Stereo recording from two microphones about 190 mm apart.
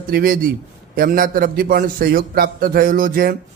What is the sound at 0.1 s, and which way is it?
A man's voice, 50° right (ahead or behind).